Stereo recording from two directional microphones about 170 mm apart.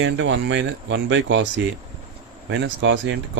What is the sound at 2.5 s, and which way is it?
Speech, 90° right.